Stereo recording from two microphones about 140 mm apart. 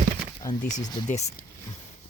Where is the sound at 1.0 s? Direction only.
55° left (ahead or behind).